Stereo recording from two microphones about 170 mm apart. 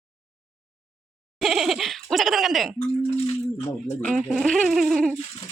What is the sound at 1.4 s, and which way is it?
Laughter, centre (ahead or behind).